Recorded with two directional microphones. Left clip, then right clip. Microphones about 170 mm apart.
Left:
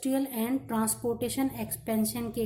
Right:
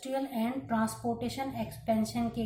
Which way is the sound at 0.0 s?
45° left (ahead or behind).